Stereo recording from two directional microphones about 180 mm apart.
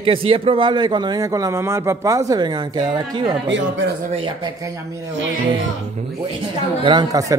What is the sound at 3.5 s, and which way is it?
Speech, 80° right.